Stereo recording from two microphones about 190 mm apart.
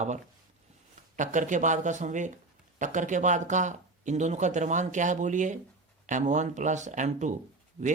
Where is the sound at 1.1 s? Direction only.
40° right (ahead or behind).